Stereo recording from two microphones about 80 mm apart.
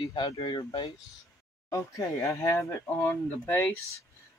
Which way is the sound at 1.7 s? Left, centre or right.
Left.